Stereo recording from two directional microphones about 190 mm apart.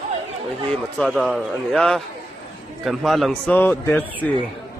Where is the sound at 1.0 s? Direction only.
Centre (ahead or behind).